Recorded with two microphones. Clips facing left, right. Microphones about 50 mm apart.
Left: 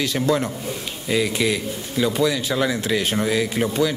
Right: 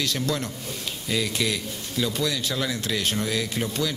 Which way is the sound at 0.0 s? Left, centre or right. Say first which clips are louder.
Left 6 dB; centre.